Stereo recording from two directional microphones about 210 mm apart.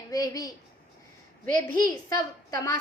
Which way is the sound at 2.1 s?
15° left (ahead or behind).